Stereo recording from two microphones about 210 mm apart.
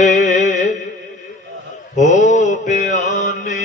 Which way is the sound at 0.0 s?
35° left (ahead or behind).